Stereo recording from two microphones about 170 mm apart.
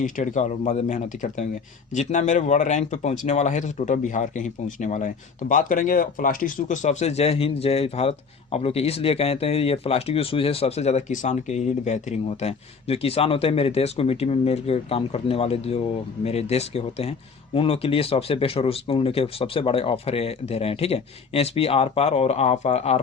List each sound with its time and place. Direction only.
0.0 s speech: 50° left (ahead or behind)